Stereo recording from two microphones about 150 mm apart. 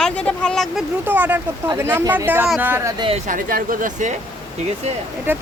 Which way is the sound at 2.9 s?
35° right (ahead or behind).